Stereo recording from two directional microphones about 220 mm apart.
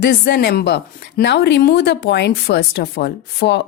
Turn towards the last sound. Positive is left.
turn(degrees=50)  # may be behind; listen again after turning